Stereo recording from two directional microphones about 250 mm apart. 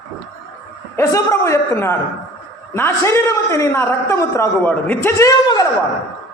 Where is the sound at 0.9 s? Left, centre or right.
Centre.